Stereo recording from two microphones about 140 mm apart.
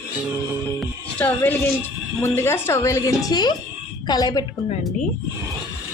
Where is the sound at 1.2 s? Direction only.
15° left (ahead or behind).